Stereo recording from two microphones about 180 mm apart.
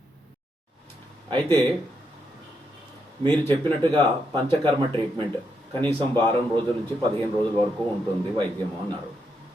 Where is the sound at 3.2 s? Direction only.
10° left (ahead or behind).